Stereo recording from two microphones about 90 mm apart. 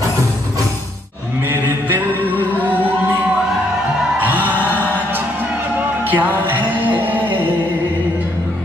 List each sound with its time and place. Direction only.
2.5 s music: 20° right (ahead or behind)
4.3 s music: 20° right (ahead or behind)